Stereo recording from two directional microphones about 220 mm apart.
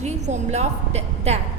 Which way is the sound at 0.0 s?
30° right (ahead or behind).